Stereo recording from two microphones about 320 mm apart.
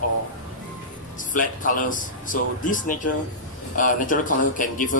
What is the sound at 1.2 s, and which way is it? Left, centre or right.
A man's voice, left.